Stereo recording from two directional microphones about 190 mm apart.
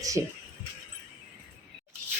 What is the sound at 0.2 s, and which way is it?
Speech, 15° right (ahead or behind).